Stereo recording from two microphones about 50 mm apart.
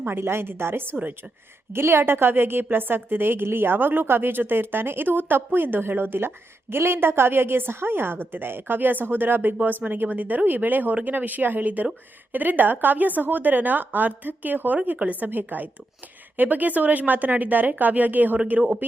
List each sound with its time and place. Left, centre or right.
0.0 s a woman's voice: right
15.2 s a woman's voice: right